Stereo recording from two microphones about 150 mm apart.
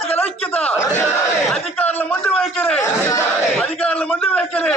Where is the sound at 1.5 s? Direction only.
10° left (ahead or behind).